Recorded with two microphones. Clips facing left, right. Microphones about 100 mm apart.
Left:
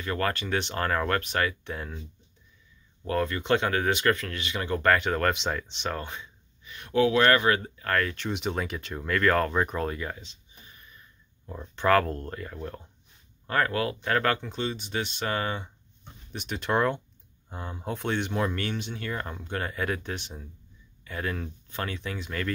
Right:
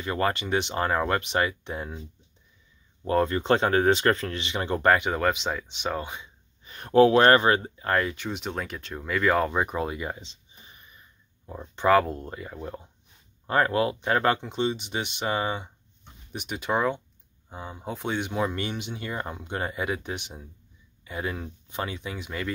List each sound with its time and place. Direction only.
0.0 s speech: 20° right (ahead or behind)
3.1 s speech: 30° right (ahead or behind)
6.6 s speech: 40° right (ahead or behind); by 8.2 s 20° right (ahead or behind)
8.2 s speech: centre (ahead or behind)
13.5 s speech: 25° right (ahead or behind)